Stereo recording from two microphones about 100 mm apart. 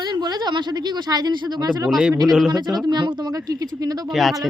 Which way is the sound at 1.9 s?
10° right (ahead or behind).